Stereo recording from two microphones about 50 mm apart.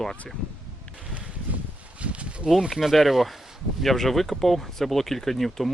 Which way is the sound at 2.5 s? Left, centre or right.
Centre.